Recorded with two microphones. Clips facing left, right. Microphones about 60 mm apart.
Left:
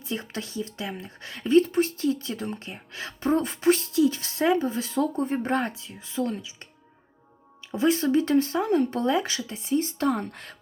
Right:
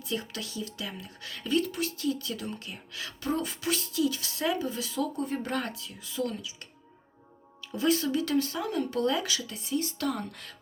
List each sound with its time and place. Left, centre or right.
0.1 s speech: left
7.7 s speech: left